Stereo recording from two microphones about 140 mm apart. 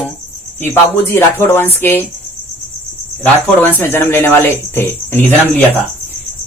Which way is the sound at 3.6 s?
15° left (ahead or behind).